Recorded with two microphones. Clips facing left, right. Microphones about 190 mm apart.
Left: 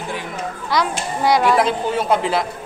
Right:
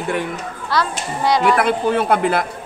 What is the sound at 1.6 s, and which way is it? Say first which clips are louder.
Speech: right 3 dB; 60° right (ahead or behind).